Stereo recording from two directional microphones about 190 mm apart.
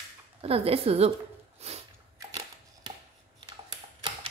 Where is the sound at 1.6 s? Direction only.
35° right (ahead or behind).